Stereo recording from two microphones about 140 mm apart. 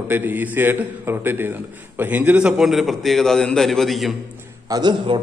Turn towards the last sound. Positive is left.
turn(degrees=-30)  # may be behind; listen again after turning